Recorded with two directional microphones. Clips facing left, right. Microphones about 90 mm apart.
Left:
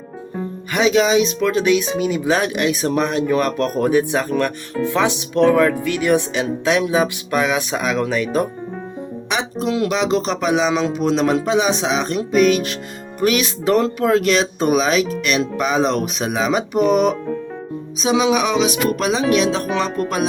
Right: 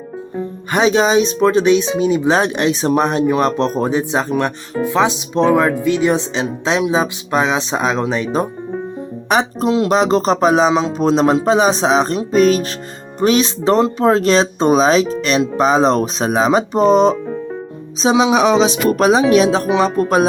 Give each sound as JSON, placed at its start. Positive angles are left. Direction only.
{"t": 0.7, "sound": "speech", "side_deg": -35}
{"t": 9.3, "sound": "speech", "side_deg": -40}